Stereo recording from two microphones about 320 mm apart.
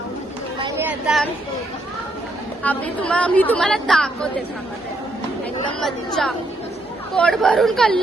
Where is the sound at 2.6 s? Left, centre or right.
Centre.